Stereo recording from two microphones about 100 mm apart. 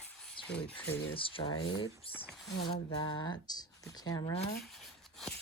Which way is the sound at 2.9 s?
45° left (ahead or behind).